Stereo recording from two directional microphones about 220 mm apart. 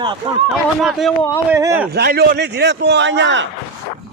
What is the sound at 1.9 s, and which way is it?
A man's voice, 45° right (ahead or behind).